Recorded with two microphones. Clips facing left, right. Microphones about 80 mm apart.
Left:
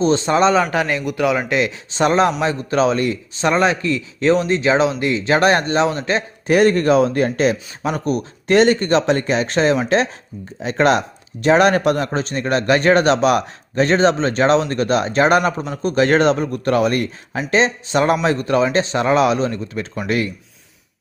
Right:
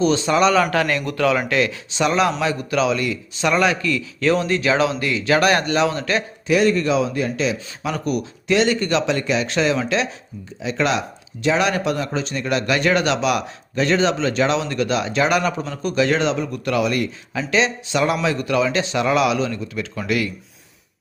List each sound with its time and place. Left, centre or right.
0.0 s a man's voice: left
1.9 s a man's voice: left
6.5 s a man's voice: left
7.9 s a man's voice: left